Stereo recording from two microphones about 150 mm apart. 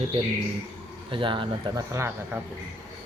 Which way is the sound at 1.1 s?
35° right (ahead or behind).